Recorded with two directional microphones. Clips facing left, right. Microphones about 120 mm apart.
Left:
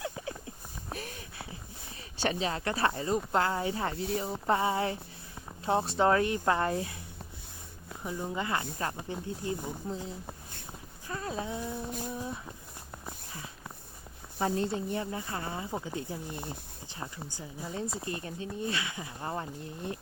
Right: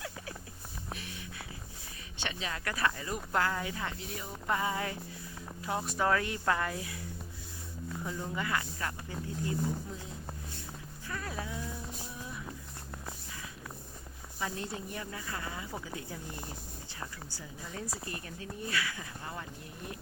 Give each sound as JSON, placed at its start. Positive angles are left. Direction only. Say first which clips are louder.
{"t": 0.9, "sound": "a sound", "louder": "left 8 dB", "side_deg": 45}
{"t": 2.1, "sound": "speech", "louder": "left 8 dB", "side_deg": 40}
{"t": 6.6, "sound": "speech", "louder": "left 5 dB", "side_deg": 35}
{"t": 8.0, "sound": "speech", "louder": "left 4 dB", "side_deg": 15}
{"t": 11.1, "sound": "speech", "louder": "left 4 dB", "side_deg": 25}
{"t": 11.9, "sound": "music", "louder": "left 8 dB", "side_deg": 55}
{"t": 12.1, "sound": "a sound", "louder": "left 7 dB", "side_deg": 35}
{"t": 14.4, "sound": "speech", "louder": "left 8 dB", "side_deg": 30}
{"t": 19.2, "sound": "speech", "louder": "left 10 dB", "side_deg": 35}